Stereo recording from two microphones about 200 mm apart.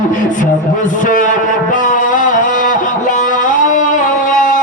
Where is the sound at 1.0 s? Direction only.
40° left (ahead or behind).